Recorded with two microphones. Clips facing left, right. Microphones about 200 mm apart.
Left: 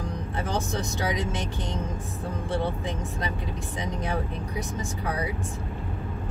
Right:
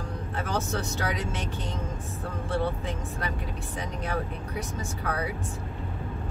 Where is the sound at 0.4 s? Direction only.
15° left (ahead or behind).